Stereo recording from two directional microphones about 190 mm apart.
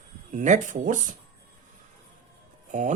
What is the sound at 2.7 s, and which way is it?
Speech, 40° right (ahead or behind).